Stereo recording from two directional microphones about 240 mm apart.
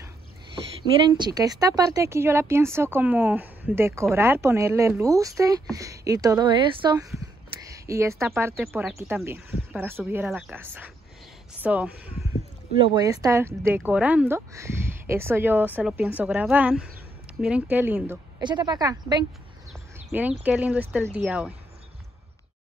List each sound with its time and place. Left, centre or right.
0.8 s a woman's voice: right
7.6 s a sound: centre
8.4 s a woman's voice: centre